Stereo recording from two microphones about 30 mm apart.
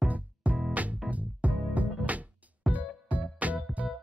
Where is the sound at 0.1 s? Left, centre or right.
Right.